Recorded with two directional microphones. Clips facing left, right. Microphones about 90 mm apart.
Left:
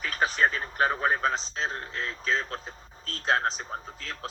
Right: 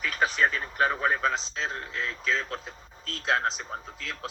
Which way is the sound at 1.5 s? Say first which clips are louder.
Even; 35° left (ahead or behind).